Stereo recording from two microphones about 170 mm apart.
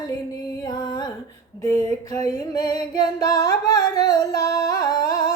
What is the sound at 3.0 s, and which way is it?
Singing, 20° left (ahead or behind).